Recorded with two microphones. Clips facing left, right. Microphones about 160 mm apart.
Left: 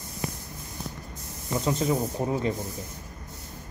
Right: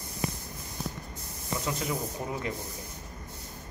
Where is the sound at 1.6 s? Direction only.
30° left (ahead or behind).